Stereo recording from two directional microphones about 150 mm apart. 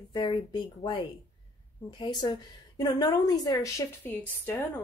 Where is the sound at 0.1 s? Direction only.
30° left (ahead or behind).